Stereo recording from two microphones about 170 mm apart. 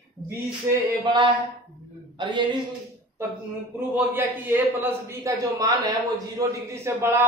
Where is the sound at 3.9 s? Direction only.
10° right (ahead or behind).